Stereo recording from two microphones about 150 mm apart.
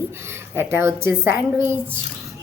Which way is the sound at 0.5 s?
15° right (ahead or behind).